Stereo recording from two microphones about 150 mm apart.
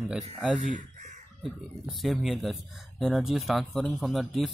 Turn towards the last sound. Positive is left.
turn(degrees=0)  # may be behind; listen again after turning